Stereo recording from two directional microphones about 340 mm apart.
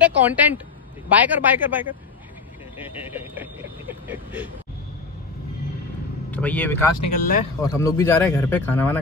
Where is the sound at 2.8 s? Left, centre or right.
Centre.